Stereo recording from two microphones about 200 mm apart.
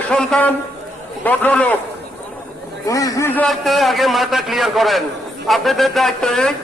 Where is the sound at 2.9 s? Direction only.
15° left (ahead or behind).